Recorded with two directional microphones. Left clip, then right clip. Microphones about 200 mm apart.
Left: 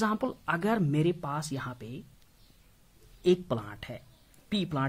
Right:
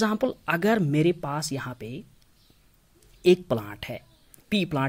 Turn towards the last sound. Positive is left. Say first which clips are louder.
# right 6 dB
turn(degrees=-20)  # may be behind; listen again after turning